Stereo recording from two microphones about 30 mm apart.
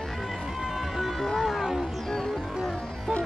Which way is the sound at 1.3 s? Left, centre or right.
Centre.